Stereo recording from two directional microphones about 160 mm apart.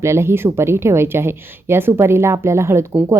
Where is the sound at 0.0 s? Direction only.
15° right (ahead or behind).